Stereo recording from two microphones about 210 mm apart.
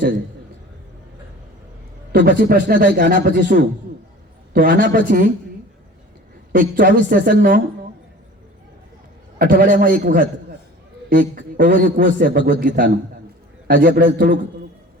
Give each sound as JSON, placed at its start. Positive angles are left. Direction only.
{"t": 2.4, "sound": "a woman's voice", "side_deg": -45}
{"t": 6.5, "sound": "a woman's voice", "side_deg": -45}
{"t": 9.4, "sound": "a man's voice", "side_deg": -45}